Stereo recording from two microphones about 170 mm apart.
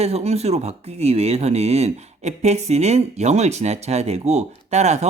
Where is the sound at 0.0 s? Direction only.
40° right (ahead or behind).